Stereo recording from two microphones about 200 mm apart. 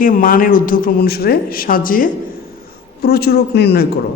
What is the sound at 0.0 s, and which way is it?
A man's voice, 45° left (ahead or behind).